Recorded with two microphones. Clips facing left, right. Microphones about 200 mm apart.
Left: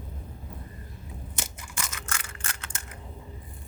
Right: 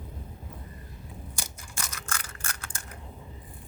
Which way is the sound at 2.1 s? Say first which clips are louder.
Even; 25° left (ahead or behind).